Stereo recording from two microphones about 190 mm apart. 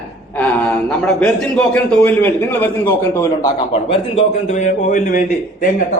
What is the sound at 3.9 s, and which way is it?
A man's voice, 35° left (ahead or behind).